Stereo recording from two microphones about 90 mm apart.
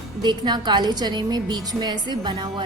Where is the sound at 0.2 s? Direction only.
55° right (ahead or behind).